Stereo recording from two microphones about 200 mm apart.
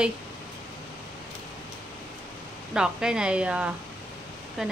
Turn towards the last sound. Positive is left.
turn(degrees=0)  # may be behind; listen again after turning